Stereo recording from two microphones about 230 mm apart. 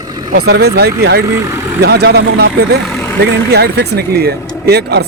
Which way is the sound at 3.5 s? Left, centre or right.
Right.